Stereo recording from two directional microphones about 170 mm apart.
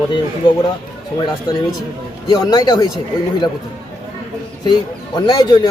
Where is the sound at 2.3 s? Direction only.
25° left (ahead or behind).